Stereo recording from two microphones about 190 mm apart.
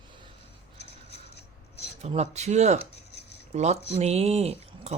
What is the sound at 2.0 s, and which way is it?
Speech, 35° right (ahead or behind).